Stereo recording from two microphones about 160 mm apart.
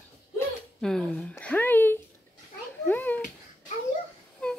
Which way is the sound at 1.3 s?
10° left (ahead or behind).